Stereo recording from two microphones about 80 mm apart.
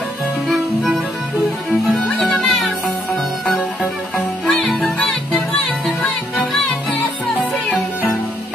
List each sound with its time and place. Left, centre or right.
1.7 s music: centre
4.5 s music: centre
4.7 s music: centre